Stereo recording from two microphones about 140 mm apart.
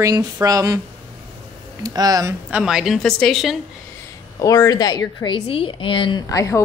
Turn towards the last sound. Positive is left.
turn(degrees=25)  # may be behind; listen again after turning